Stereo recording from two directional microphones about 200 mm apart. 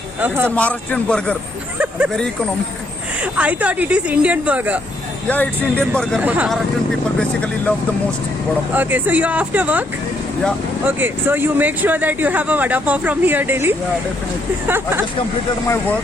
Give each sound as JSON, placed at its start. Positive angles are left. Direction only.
{"t": 0.2, "sound": "speech", "side_deg": -10}
{"t": 0.5, "sound": "a man's voice", "side_deg": 5}
{"t": 3.3, "sound": "speech", "side_deg": -5}
{"t": 5.3, "sound": "a man's voice", "side_deg": 10}
{"t": 7.2, "sound": "speech", "side_deg": 5}
{"t": 8.7, "sound": "speech", "side_deg": -10}
{"t": 10.8, "sound": "speech", "side_deg": -10}
{"t": 15.6, "sound": "a man's voice", "side_deg": 10}